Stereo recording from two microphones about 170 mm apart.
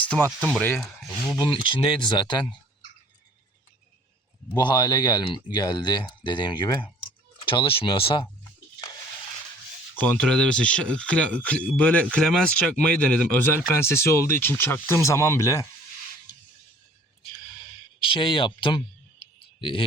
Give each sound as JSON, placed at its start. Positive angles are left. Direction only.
{"t": 0.0, "sound": "speech", "side_deg": 10}
{"t": 1.5, "sound": "speech", "side_deg": 30}
{"t": 4.5, "sound": "speech", "side_deg": 25}
{"t": 9.9, "sound": "speech", "side_deg": 10}
{"t": 17.3, "sound": "a sound", "side_deg": 25}